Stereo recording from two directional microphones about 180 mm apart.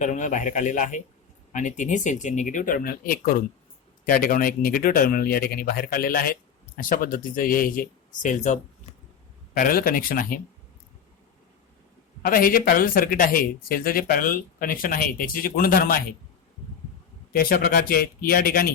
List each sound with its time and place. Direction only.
0.0 s speech: 40° left (ahead or behind)
9.6 s speech: 50° left (ahead or behind)
12.2 s speech: 55° left (ahead or behind)
17.3 s speech: 55° left (ahead or behind)